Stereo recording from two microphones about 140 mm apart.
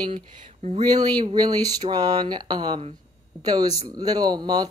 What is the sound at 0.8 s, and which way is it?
Speech, 30° right (ahead or behind).